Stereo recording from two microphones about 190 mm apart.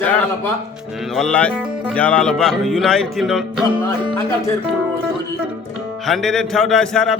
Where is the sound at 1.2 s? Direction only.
5° left (ahead or behind).